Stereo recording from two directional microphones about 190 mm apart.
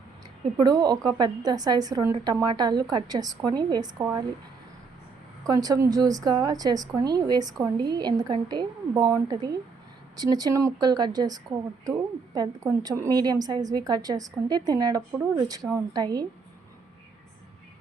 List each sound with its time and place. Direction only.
0.6 s a woman's voice: 20° right (ahead or behind)
5.4 s a woman's voice: 20° right (ahead or behind)